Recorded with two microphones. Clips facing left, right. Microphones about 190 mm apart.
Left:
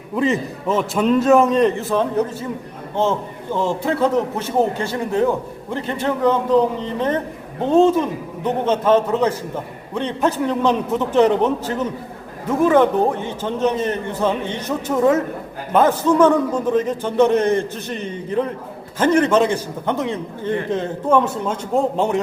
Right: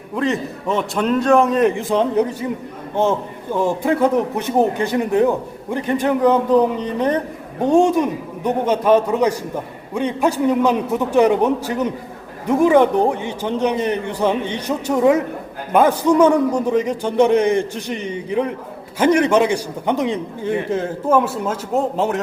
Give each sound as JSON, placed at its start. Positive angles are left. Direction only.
{"t": 0.2, "sound": "a man's voice", "side_deg": 0}
{"t": 1.7, "sound": "a man's voice", "side_deg": -15}